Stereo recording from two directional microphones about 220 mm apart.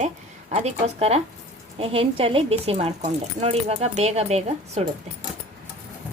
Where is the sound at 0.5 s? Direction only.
30° right (ahead or behind).